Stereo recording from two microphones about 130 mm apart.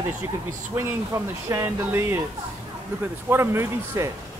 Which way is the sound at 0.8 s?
20° right (ahead or behind).